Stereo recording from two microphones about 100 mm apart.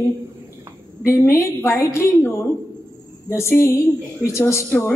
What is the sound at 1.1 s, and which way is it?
A woman's voice, 25° left (ahead or behind).